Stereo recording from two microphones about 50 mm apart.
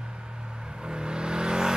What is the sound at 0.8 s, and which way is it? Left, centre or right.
Vehicle, centre.